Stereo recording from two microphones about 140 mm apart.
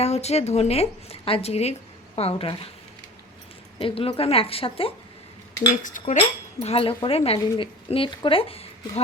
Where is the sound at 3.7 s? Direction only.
45° left (ahead or behind).